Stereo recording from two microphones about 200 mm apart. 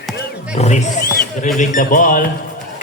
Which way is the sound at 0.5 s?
35° left (ahead or behind).